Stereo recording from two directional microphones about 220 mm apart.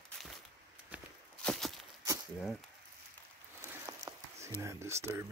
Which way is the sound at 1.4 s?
Centre (ahead or behind).